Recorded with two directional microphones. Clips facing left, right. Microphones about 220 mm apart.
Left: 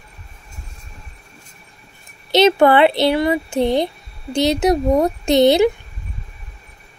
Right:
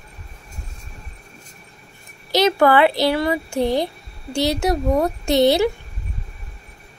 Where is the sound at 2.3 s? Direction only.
25° left (ahead or behind).